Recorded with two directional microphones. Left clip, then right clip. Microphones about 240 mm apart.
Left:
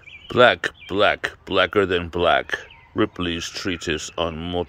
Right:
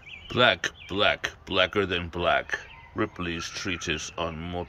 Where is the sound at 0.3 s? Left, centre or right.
Centre.